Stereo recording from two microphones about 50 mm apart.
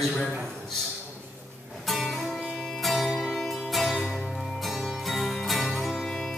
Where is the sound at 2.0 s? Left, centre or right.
Centre.